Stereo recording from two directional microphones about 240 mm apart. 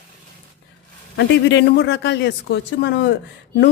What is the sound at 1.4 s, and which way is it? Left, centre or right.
Speech, left.